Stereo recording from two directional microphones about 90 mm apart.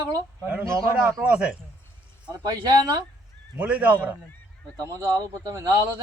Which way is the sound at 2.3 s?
45° right (ahead or behind).